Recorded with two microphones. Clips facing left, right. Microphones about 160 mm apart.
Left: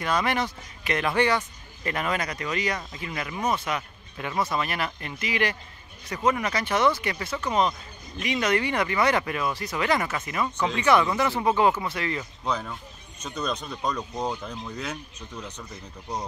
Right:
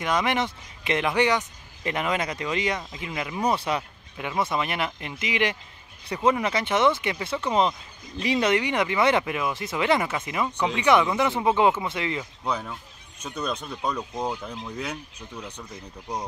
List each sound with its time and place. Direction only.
0.0 s a man's voice: 20° right (ahead or behind)
3.4 s a man's voice: 30° right (ahead or behind)
8.5 s a man's voice: 15° right (ahead or behind)
10.4 s a man's voice: 15° right (ahead or behind)
12.2 s speech: 10° right (ahead or behind)